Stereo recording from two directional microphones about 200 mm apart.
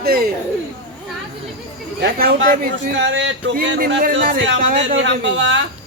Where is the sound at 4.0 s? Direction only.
45° right (ahead or behind).